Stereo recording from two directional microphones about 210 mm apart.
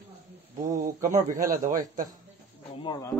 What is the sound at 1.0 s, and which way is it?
Speech, 40° right (ahead or behind).